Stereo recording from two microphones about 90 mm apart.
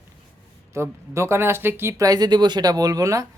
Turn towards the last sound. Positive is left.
turn(degrees=-40)  # may be behind; listen again after turning